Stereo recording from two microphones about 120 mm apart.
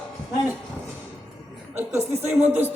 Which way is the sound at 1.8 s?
20° right (ahead or behind).